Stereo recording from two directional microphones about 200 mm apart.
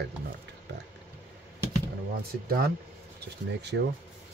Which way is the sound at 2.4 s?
50° right (ahead or behind).